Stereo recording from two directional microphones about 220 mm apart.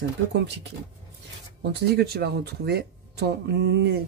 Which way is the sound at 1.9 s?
45° right (ahead or behind).